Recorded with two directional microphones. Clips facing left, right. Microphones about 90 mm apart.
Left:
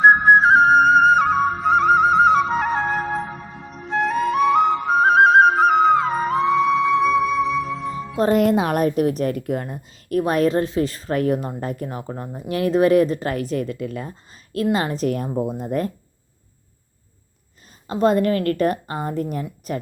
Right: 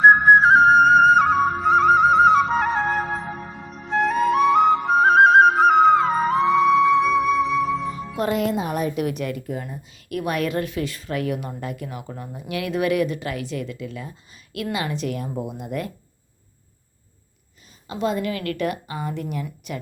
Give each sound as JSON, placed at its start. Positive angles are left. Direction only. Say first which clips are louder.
{"t": 0.0, "sound": "flute", "louder": "even", "side_deg": 0}
{"t": 8.2, "sound": "speech", "louder": "left 6 dB", "side_deg": 45}
{"t": 8.5, "sound": "a woman's voice", "louder": "left 5 dB", "side_deg": 75}
{"t": 8.8, "sound": "speech", "louder": "left 5 dB", "side_deg": 50}
{"t": 9.0, "sound": "a woman's voice", "louder": "left 5 dB", "side_deg": 40}
{"t": 9.4, "sound": "speech", "louder": "left 5 dB", "side_deg": 60}
{"t": 10.1, "sound": "a woman's voice", "louder": "left 6 dB", "side_deg": 35}
{"t": 14.5, "sound": "a woman's voice", "louder": "left 6 dB", "side_deg": 35}
{"t": 17.8, "sound": "a woman's voice", "louder": "left 7 dB", "side_deg": 50}